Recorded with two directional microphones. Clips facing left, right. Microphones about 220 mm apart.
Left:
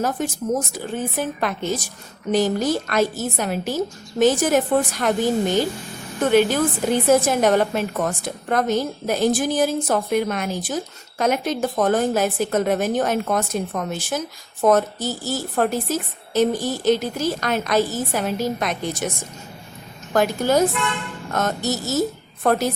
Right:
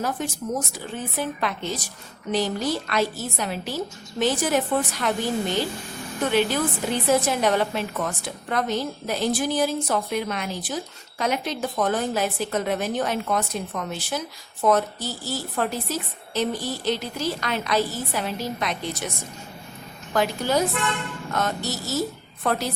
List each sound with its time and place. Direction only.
0.0 s a woman's voice: 45° left (ahead or behind)
20.1 s a woman's voice: 45° left (ahead or behind)